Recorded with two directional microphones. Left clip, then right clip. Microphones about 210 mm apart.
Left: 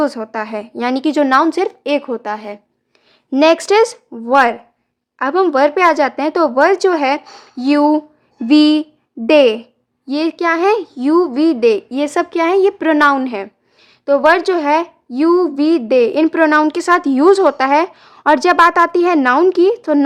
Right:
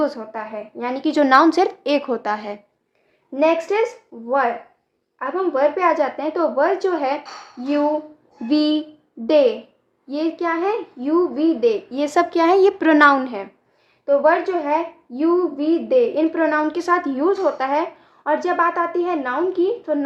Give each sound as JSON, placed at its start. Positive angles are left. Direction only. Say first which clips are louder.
{"t": 0.0, "sound": "a woman's voice", "louder": "left 5 dB", "side_deg": 30}
{"t": 3.3, "sound": "speech", "louder": "left 7 dB", "side_deg": 40}
{"t": 8.4, "sound": "a sound", "louder": "left 8 dB", "side_deg": 30}
{"t": 10.1, "sound": "speech", "louder": "left 6 dB", "side_deg": 30}